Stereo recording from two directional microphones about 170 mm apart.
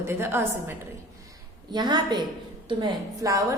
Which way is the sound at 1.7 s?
25° right (ahead or behind).